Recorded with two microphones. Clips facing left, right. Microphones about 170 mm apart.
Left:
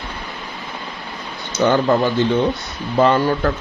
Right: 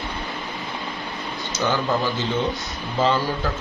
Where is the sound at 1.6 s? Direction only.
55° left (ahead or behind).